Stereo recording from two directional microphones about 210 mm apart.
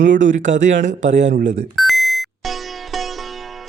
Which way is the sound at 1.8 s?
Centre (ahead or behind).